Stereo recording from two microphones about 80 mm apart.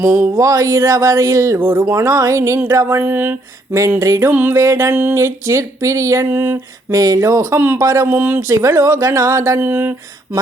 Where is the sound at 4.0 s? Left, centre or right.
Right.